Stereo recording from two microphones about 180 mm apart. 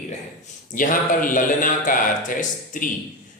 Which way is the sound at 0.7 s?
45° left (ahead or behind).